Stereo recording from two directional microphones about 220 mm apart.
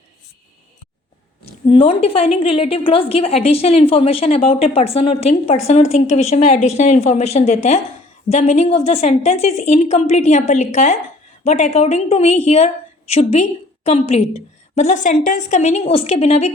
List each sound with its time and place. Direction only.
1.6 s a woman's voice: 25° left (ahead or behind)